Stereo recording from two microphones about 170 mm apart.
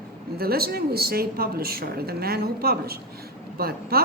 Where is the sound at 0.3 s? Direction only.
65° right (ahead or behind).